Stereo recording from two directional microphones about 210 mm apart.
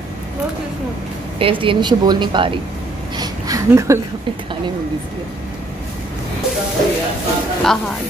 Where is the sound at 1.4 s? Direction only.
25° right (ahead or behind).